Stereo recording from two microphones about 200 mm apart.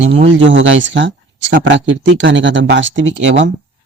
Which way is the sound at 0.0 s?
60° right (ahead or behind).